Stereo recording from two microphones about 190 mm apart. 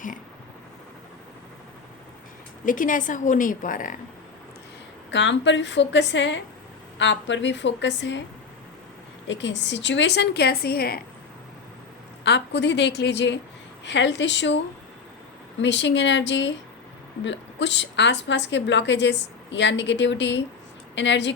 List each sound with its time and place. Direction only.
2.6 s a woman's voice: 45° left (ahead or behind)
5.1 s a woman's voice: 70° left (ahead or behind)
9.2 s a woman's voice: 70° left (ahead or behind); by 11.0 s 55° left (ahead or behind)
12.2 s a woman's voice: 65° left (ahead or behind)
15.6 s a woman's voice: 70° left (ahead or behind)